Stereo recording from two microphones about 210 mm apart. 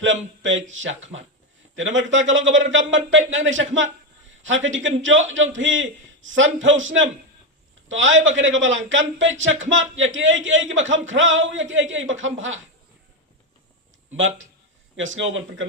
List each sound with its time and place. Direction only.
0.0 s speech: 65° right (ahead or behind)
14.2 s speech: 65° right (ahead or behind)